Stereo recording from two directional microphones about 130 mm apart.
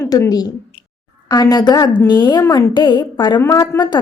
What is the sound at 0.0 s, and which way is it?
A woman's voice, 25° left (ahead or behind).